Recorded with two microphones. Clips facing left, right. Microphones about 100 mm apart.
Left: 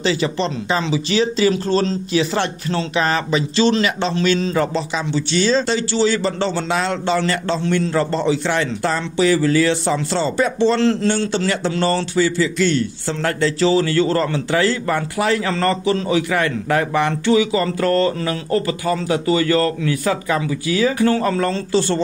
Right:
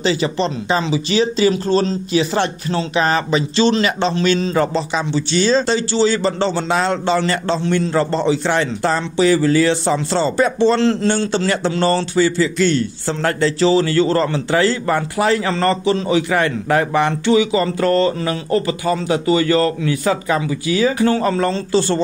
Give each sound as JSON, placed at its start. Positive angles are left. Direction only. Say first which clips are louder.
{"t": 0.0, "sound": "a man's voice", "louder": "right 1 dB", "side_deg": -20}